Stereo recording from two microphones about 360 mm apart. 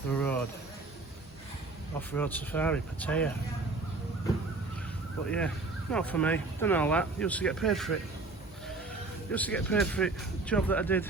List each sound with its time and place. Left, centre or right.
0.1 s a sound: centre
2.0 s speech: centre
5.9 s speech: centre
9.3 s speech: centre